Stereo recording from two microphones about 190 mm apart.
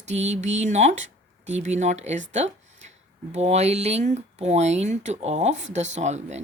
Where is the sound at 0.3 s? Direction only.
35° right (ahead or behind).